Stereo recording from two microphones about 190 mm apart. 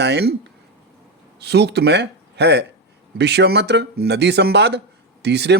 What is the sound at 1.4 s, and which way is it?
Speech, 60° right (ahead or behind).